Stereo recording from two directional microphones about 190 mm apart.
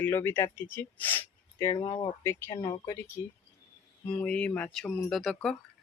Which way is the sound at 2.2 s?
15° left (ahead or behind).